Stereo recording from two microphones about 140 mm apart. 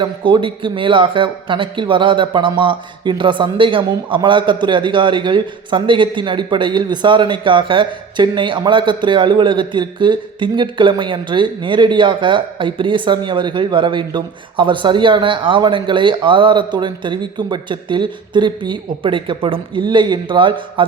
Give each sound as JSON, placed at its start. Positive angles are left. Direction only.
{"t": 0.0, "sound": "speech", "side_deg": -35}